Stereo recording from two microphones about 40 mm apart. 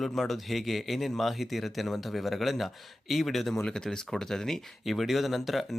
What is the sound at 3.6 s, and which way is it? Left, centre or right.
Speech, centre.